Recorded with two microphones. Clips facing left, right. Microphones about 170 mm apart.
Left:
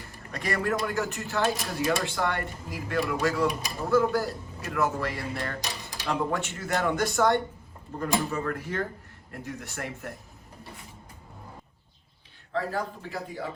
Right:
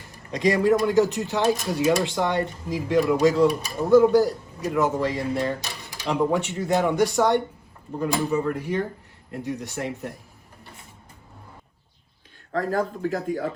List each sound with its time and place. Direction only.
0.3 s speech: 15° right (ahead or behind)
12.5 s speech: 45° right (ahead or behind)